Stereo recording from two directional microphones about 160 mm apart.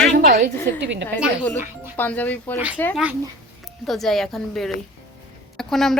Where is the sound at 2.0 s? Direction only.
10° left (ahead or behind).